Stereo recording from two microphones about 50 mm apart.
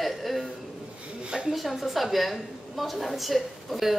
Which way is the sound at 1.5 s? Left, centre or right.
Centre.